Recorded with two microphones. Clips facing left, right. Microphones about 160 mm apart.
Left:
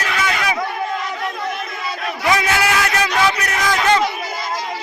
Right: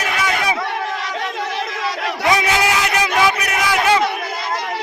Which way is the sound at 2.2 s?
20° right (ahead or behind).